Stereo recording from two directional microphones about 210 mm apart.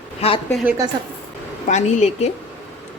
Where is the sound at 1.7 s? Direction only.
35° left (ahead or behind).